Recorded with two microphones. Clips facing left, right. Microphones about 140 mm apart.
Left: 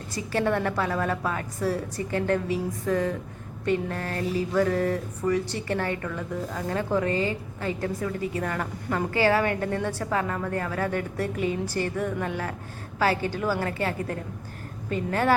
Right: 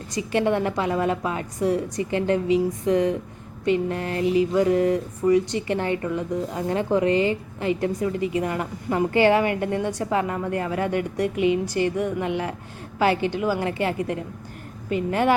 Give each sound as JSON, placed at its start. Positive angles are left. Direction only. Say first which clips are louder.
{"t": 0.1, "sound": "a woman's voice", "louder": "right 3 dB", "side_deg": -20}